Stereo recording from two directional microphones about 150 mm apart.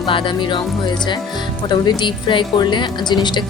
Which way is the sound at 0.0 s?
35° left (ahead or behind).